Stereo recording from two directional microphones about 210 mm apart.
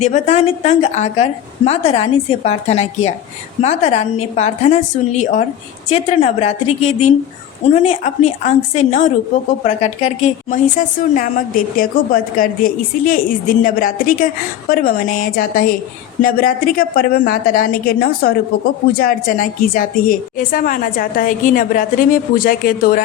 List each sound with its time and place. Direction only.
0.0 s a woman's voice: 30° left (ahead or behind)